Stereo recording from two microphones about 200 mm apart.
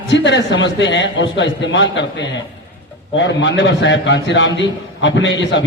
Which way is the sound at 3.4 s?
60° left (ahead or behind).